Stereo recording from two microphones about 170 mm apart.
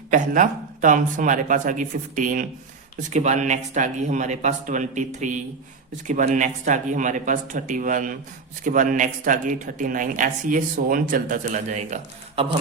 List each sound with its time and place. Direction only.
0.1 s speech: 50° right (ahead or behind)